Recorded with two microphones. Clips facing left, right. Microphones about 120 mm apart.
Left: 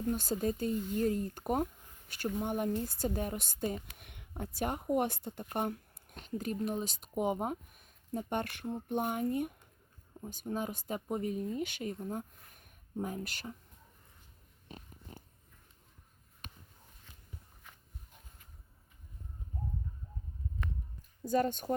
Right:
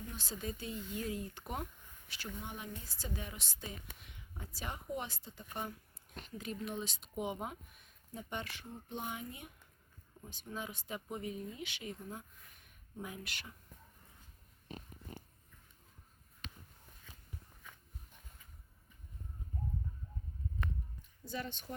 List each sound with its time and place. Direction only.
0.1 s speech: 50° left (ahead or behind)
16.4 s a sound: 45° left (ahead or behind)
21.2 s speech: 45° left (ahead or behind)